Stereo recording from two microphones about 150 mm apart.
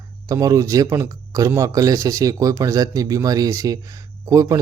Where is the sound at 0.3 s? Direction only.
20° right (ahead or behind).